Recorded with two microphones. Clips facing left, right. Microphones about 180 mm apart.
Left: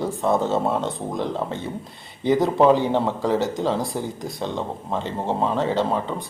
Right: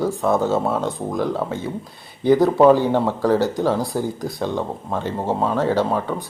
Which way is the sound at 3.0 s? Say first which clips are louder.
Right 4 dB; centre (ahead or behind).